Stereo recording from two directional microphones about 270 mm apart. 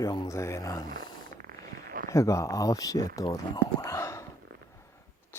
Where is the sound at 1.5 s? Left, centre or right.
Right.